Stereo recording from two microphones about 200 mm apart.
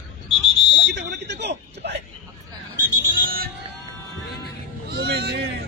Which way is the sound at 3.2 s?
45° right (ahead or behind).